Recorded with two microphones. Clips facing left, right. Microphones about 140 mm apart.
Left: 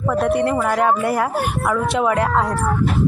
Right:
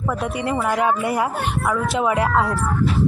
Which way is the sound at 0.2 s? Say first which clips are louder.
Left 8 dB; 55° left (ahead or behind).